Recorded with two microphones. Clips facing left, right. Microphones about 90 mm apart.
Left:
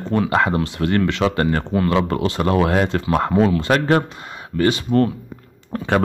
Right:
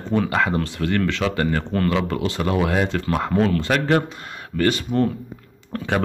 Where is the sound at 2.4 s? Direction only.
45° left (ahead or behind).